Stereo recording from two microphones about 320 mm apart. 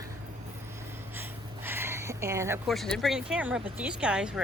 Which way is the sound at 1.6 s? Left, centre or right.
Centre.